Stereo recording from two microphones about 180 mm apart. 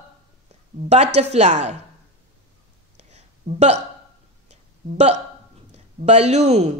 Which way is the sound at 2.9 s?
40° right (ahead or behind).